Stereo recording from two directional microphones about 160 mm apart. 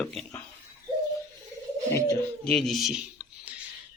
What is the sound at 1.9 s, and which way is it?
Bird, 20° left (ahead or behind).